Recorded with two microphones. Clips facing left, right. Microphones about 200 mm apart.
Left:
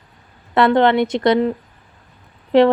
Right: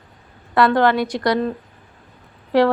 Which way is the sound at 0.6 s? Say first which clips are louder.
Left 2 dB; 25° left (ahead or behind).